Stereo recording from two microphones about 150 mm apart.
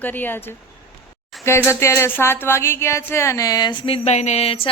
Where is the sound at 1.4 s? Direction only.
15° left (ahead or behind).